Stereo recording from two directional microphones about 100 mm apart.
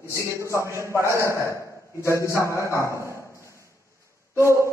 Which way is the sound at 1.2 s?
30° left (ahead or behind).